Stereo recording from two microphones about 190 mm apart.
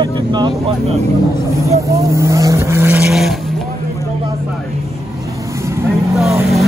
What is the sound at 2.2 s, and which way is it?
Vehicle, 15° right (ahead or behind).